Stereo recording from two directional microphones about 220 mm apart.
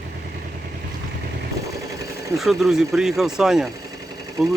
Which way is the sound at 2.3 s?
Centre (ahead or behind).